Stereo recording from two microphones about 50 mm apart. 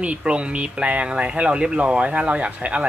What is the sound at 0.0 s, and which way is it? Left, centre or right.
Speech, right.